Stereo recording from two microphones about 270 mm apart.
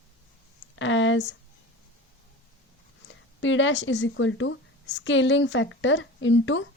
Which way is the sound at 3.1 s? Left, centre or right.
Left.